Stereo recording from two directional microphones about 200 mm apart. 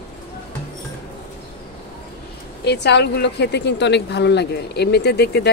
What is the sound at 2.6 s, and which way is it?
A woman's voice, 60° left (ahead or behind).